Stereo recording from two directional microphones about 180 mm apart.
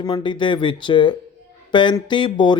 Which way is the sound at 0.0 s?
25° left (ahead or behind).